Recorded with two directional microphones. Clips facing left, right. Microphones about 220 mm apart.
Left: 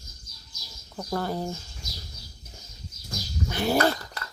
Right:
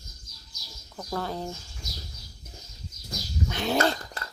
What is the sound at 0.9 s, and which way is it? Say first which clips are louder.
Speech: left 3 dB; 5° left (ahead or behind).